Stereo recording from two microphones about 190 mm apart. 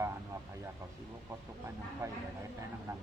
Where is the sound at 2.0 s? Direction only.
15° right (ahead or behind).